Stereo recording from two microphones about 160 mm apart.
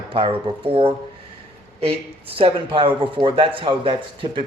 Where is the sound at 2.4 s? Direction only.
30° right (ahead or behind).